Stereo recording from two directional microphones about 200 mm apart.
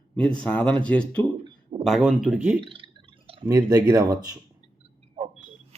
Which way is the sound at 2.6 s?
25° right (ahead or behind).